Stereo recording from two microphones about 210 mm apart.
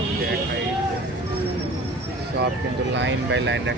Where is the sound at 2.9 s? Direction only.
60° right (ahead or behind).